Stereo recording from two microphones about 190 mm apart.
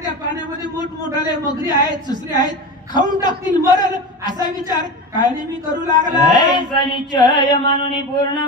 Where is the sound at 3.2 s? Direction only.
20° left (ahead or behind).